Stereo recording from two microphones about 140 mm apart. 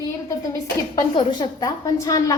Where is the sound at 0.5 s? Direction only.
35° left (ahead or behind).